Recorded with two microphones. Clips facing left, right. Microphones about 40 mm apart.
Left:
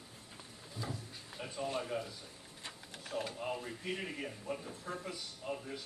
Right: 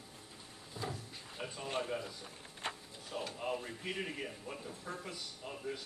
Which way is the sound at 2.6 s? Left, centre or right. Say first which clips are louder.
Right 8 dB; right.